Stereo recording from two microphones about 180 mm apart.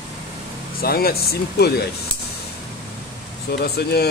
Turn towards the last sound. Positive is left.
turn(degrees=60)  # may be behind; listen again after turning